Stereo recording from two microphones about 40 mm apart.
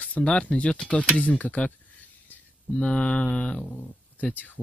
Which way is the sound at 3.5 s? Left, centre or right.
Left.